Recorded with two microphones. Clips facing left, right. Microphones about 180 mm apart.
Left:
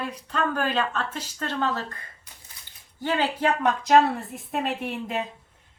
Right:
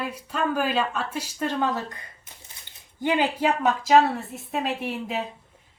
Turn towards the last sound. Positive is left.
turn(degrees=-5)  # may be behind; listen again after turning